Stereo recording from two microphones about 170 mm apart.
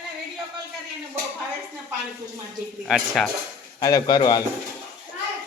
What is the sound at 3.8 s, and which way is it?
Speech, 20° left (ahead or behind).